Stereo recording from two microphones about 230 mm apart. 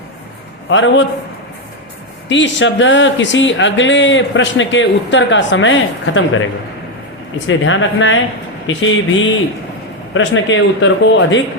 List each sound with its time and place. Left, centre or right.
0.7 s speech: left
2.3 s speech: left